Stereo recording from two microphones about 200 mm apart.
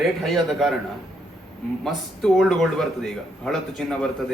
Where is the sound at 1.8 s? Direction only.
Centre (ahead or behind).